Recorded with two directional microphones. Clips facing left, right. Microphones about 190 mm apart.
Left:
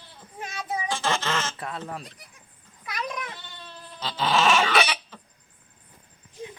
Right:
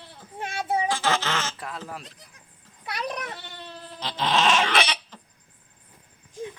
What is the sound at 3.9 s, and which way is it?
Dog, 20° right (ahead or behind).